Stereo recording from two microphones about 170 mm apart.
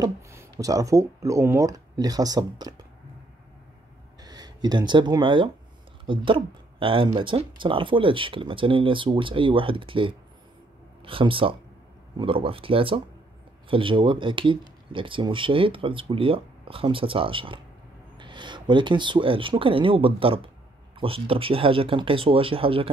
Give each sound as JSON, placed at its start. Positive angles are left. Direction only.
{"t": 0.0, "sound": "speech", "side_deg": -20}
{"t": 4.2, "sound": "speech", "side_deg": -25}